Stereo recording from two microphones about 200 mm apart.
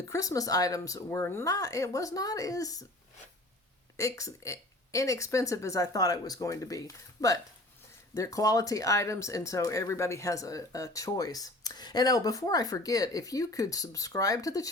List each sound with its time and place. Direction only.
0.1 s speech: 15° left (ahead or behind)
3.9 s speech: 15° left (ahead or behind)